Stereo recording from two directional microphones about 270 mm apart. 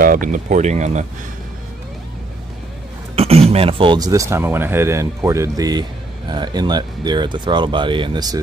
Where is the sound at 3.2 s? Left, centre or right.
Right.